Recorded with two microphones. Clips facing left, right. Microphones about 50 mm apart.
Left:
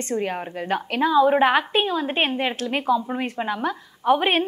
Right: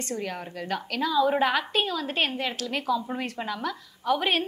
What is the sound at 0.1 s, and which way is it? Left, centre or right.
A woman's voice, left.